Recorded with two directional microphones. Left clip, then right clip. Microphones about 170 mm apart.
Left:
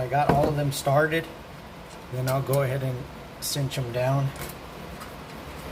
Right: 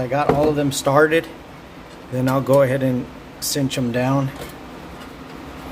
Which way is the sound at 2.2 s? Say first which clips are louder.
Right 10 dB; 60° right (ahead or behind).